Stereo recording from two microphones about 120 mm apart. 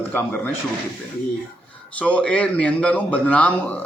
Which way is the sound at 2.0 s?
10° left (ahead or behind).